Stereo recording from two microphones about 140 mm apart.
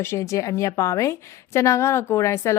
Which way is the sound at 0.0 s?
20° left (ahead or behind).